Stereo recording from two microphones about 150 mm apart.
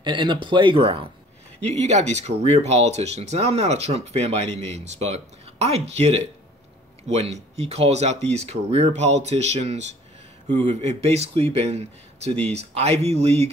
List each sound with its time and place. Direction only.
0.0 s speech: 30° right (ahead or behind)
1.6 s speech: 45° right (ahead or behind)